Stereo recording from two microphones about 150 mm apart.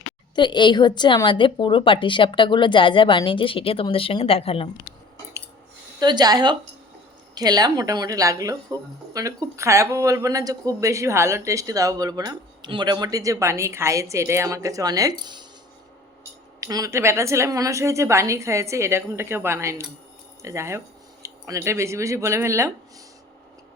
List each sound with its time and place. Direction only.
0.3 s a woman's voice: 30° left (ahead or behind)
6.0 s speech: 25° right (ahead or behind)
16.6 s speech: 25° right (ahead or behind)